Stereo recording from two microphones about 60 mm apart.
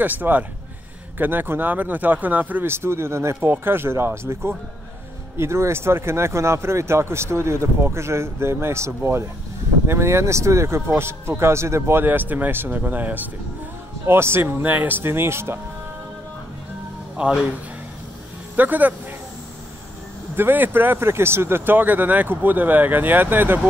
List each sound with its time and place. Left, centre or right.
0.0 s speech: right
2.7 s speech: right
3.3 s speech: right
12.0 s speech: right
14.0 s speech: right
17.2 s speech: centre
18.6 s speech: right
20.3 s speech: right